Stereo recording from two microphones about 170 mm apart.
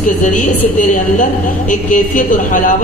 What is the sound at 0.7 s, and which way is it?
A woman's voice, 50° left (ahead or behind).